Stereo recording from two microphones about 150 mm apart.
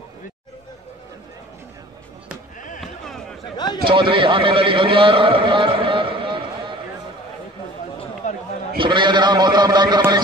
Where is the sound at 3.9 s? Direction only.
35° right (ahead or behind).